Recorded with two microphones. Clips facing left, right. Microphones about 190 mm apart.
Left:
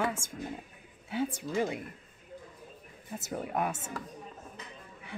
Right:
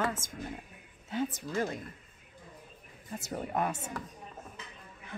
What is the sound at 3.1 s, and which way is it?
Speech, centre (ahead or behind).